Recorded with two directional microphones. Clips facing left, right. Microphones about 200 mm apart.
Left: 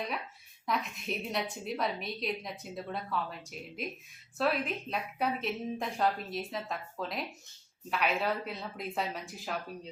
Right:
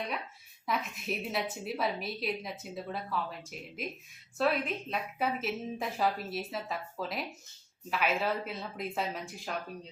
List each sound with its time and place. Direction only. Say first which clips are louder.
0.6 s a woman's voice: even; centre (ahead or behind)